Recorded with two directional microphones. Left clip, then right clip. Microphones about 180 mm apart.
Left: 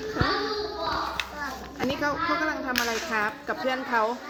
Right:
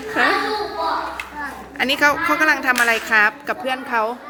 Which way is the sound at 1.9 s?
15° right (ahead or behind).